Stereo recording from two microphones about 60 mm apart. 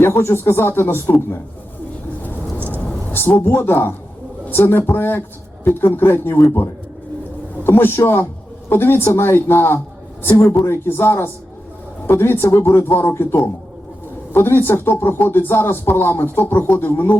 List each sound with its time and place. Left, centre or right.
0.0 s speech: left
2.6 s vehicle: right
3.1 s speech: left